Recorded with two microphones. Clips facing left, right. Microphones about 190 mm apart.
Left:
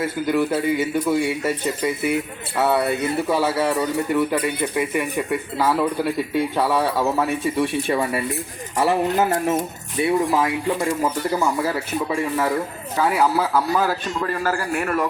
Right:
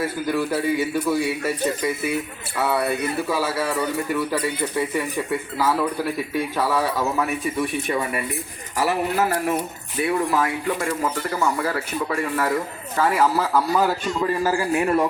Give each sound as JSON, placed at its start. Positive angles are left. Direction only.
{"t": 0.0, "sound": "speech", "side_deg": 25}
{"t": 6.3, "sound": "speech", "side_deg": 25}
{"t": 14.4, "sound": "a man's voice", "side_deg": -15}